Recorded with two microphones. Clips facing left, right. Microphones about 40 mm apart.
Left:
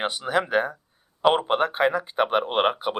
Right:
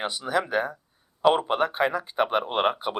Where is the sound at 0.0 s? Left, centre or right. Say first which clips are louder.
Left 2 dB; left.